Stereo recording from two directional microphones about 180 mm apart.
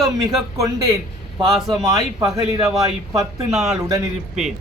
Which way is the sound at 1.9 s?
20° right (ahead or behind).